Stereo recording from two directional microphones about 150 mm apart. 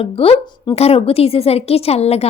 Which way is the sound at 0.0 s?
40° left (ahead or behind).